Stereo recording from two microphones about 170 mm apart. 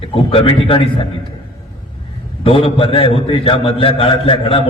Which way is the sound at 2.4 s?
35° left (ahead or behind).